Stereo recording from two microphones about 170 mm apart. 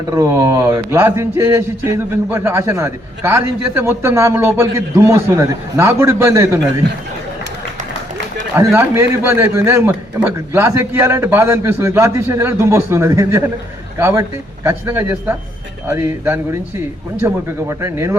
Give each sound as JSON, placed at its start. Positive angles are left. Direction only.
{"t": 0.1, "sound": "a man's voice", "side_deg": -15}
{"t": 8.5, "sound": "a man's voice", "side_deg": -15}